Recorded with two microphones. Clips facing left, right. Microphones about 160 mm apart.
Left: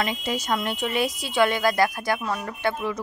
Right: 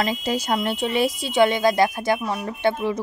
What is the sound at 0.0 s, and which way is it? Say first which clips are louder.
Speech: right 3 dB; 35° right (ahead or behind).